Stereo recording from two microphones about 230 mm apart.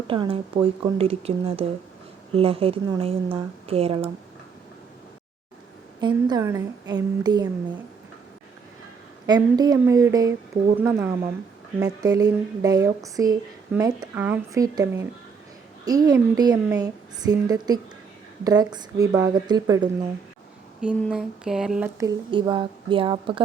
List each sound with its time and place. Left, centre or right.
0.1 s speech: right
6.0 s a woman's voice: centre
9.2 s a woman's voice: centre
21.0 s speech: centre
21.9 s speech: centre